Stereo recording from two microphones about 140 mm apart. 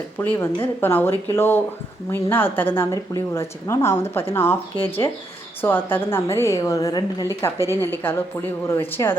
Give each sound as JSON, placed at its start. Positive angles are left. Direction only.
{"t": 0.2, "sound": "a woman's voice", "side_deg": 15}